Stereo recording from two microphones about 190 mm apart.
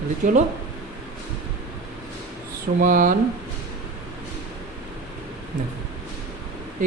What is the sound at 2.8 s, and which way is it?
Speech, 45° right (ahead or behind).